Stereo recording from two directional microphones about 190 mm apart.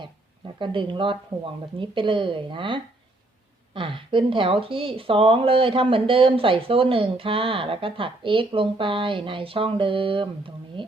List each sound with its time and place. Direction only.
0.6 s speech: 25° right (ahead or behind)